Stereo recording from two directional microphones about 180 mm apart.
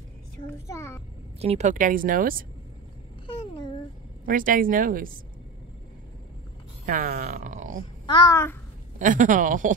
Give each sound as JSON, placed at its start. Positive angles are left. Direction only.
{"t": 0.7, "sound": "a child's voice", "side_deg": 15}
{"t": 1.4, "sound": "speech", "side_deg": -40}
{"t": 4.3, "sound": "speech", "side_deg": -50}
{"t": 6.9, "sound": "speech", "side_deg": -50}
{"t": 8.1, "sound": "a child's voice", "side_deg": 20}
{"t": 9.0, "sound": "speech", "side_deg": -45}